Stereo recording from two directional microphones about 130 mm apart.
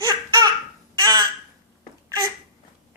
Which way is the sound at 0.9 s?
30° right (ahead or behind).